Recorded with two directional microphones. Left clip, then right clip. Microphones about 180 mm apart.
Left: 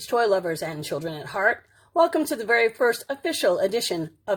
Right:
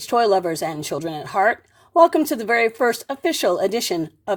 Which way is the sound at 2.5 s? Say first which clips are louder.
Right 1 dB; 20° right (ahead or behind).